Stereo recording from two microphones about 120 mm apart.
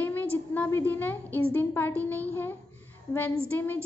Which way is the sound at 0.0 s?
15° left (ahead or behind).